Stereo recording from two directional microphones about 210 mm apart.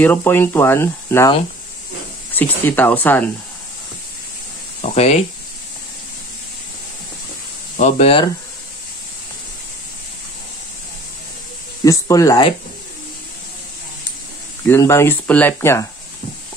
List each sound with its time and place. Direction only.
0.0 s speech: 10° left (ahead or behind)
2.3 s speech: 10° left (ahead or behind)
4.9 s speech: 30° left (ahead or behind)
7.8 s speech: 30° left (ahead or behind)
11.8 s speech: 15° left (ahead or behind)
14.7 s speech: 10° left (ahead or behind)